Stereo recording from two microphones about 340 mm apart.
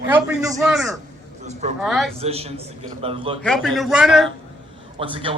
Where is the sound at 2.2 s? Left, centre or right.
Centre.